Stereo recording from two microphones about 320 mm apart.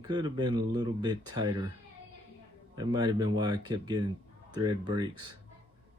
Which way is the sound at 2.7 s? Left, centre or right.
Centre.